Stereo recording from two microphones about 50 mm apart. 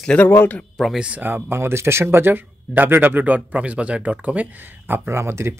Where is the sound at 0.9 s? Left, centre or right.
Right.